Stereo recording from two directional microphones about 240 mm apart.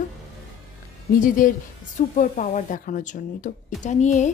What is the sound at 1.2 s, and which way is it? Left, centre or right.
Speech, left.